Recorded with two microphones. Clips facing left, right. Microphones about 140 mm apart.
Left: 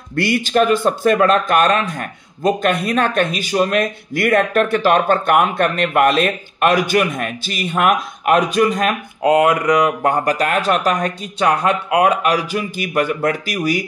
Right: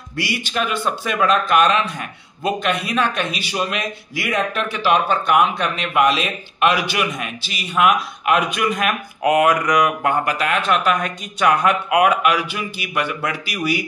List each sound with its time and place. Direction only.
0.1 s speech: 50° left (ahead or behind)